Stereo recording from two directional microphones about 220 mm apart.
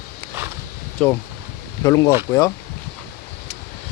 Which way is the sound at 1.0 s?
5° left (ahead or behind).